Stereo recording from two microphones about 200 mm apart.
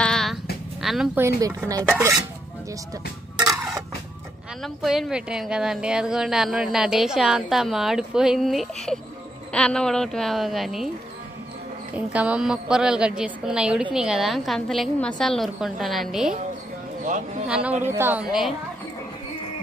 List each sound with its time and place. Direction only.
0.0 s music: centre (ahead or behind)
0.8 s a woman's voice: centre (ahead or behind)
1.2 s speech: 15° right (ahead or behind)
4.8 s a woman's voice: centre (ahead or behind)
11.9 s a woman's voice: 5° right (ahead or behind)
17.5 s a woman's voice: 5° right (ahead or behind)